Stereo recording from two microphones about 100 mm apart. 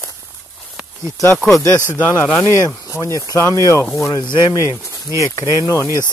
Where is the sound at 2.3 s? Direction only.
30° left (ahead or behind).